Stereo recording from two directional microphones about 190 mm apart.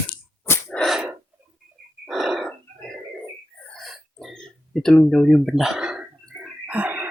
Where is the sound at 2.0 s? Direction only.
Centre (ahead or behind).